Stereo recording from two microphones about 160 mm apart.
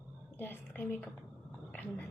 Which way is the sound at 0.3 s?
10° left (ahead or behind).